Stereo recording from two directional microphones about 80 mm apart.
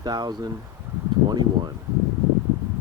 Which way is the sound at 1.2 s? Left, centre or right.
Right.